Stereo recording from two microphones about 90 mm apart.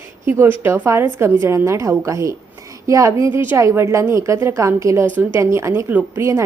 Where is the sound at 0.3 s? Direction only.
25° right (ahead or behind).